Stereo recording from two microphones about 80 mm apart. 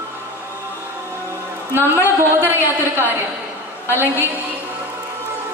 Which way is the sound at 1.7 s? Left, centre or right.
Right.